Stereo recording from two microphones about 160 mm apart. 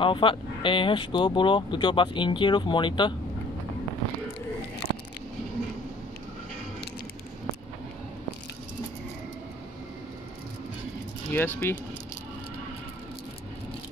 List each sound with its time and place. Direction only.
0.0 s speech: 30° left (ahead or behind)
11.2 s speech: 15° left (ahead or behind)